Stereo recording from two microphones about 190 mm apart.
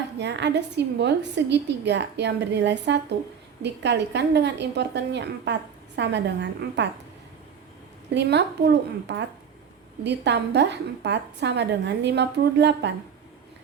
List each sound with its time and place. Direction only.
0.2 s a woman's voice: 65° right (ahead or behind)
8.1 s a woman's voice: 65° right (ahead or behind)